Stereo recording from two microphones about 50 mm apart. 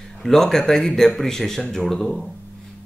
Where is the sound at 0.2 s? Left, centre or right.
Centre.